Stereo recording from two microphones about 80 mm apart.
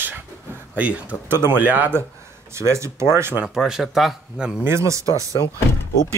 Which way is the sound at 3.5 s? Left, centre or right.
Centre.